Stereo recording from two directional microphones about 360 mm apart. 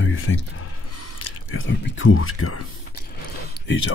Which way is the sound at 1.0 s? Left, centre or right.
Left.